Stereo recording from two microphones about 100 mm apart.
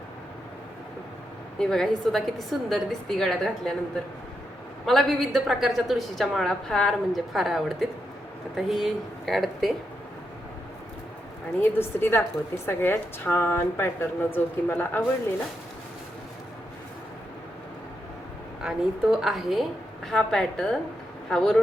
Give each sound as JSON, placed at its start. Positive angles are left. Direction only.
{"t": 1.5, "sound": "a woman's voice", "side_deg": 5}
{"t": 4.9, "sound": "a woman's voice", "side_deg": 0}
{"t": 11.6, "sound": "a woman's voice", "side_deg": 20}
{"t": 18.6, "sound": "a woman's voice", "side_deg": -5}